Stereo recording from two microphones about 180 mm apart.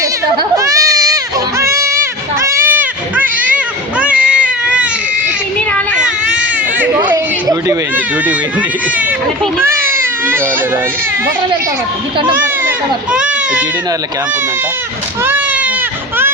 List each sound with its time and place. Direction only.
0.5 s goat: 20° right (ahead or behind)
5.5 s child singing: 5° left (ahead or behind)
6.2 s baby cry: 10° right (ahead or behind)
9.8 s baby cry: 15° right (ahead or behind)
12.6 s speech: 5° right (ahead or behind)
15.2 s baby cry: 10° right (ahead or behind)